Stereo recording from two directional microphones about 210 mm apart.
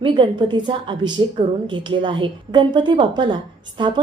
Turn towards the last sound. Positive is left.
turn(degrees=-25)  # may be behind; listen again after turning